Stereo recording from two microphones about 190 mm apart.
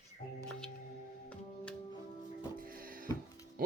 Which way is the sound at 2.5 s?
50° right (ahead or behind).